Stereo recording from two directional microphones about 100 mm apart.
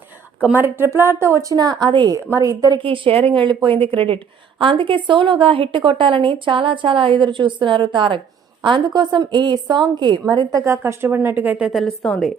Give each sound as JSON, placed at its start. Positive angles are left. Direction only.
{"t": 0.5, "sound": "speech", "side_deg": -20}
{"t": 2.1, "sound": "speech", "side_deg": -35}
{"t": 2.7, "sound": "a woman's voice", "side_deg": -60}
{"t": 10.6, "sound": "a woman's voice", "side_deg": -30}
{"t": 11.7, "sound": "a woman's voice", "side_deg": 0}